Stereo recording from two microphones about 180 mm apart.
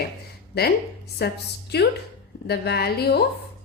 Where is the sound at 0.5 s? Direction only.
60° left (ahead or behind).